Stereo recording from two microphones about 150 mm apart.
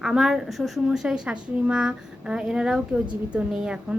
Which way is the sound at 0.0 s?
Centre (ahead or behind).